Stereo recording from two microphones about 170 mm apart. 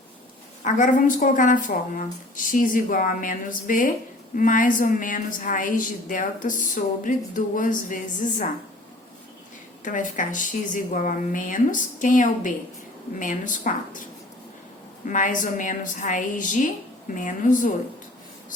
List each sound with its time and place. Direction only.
0.6 s a woman's voice: 50° left (ahead or behind)
9.8 s a woman's voice: 50° left (ahead or behind)